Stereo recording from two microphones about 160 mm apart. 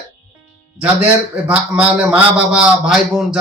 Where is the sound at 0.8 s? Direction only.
10° right (ahead or behind).